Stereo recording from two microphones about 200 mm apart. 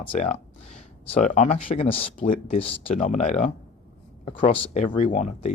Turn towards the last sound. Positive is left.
turn(degrees=35)  # may be behind; listen again after turning